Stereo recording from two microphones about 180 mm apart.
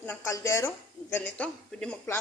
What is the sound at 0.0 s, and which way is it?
A man's voice, 15° left (ahead or behind).